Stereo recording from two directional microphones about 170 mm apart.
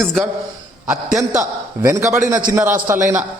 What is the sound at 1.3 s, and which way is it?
A man's voice, 20° right (ahead or behind).